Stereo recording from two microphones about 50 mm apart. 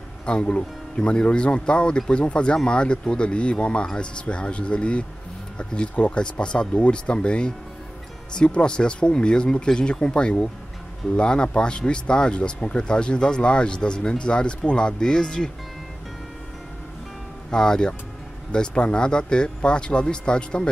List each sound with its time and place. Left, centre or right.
0.2 s speech: centre
17.5 s speech: centre